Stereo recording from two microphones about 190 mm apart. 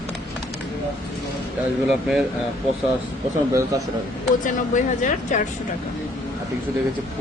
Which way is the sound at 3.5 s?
15° right (ahead or behind).